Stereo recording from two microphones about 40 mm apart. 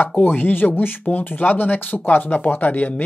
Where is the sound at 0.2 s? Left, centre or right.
Left.